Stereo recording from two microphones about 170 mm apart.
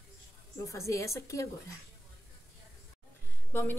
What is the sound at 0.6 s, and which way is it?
Speech, 20° left (ahead or behind).